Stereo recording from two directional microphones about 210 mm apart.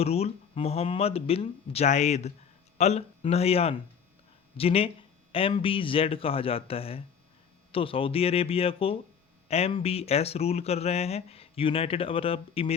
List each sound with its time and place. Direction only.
0.0 s speech: 30° left (ahead or behind)